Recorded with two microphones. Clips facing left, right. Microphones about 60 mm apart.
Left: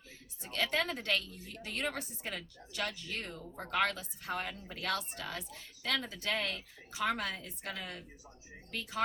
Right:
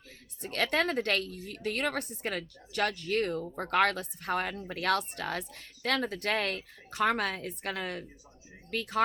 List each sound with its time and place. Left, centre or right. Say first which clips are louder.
0.4 s speech: right 5 dB; right